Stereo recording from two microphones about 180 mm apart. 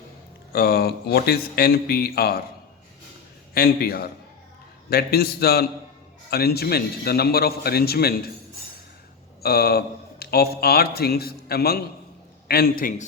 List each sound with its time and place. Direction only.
0.5 s speech: 60° left (ahead or behind)
3.5 s speech: 55° left (ahead or behind)
9.4 s speech: 60° left (ahead or behind)